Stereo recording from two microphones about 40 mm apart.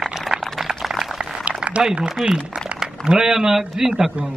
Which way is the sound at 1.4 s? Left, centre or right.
Right.